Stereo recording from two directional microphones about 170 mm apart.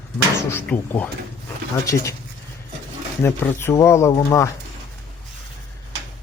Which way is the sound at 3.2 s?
15° left (ahead or behind).